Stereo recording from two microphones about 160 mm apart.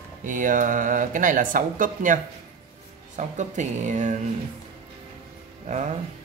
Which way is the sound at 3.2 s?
50° right (ahead or behind).